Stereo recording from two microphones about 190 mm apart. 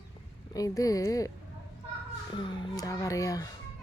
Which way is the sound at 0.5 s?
20° left (ahead or behind).